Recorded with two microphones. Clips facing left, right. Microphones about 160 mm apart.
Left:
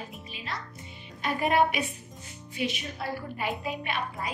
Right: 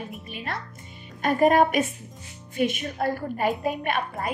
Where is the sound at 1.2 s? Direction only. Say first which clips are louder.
Right 6 dB; 45° right (ahead or behind).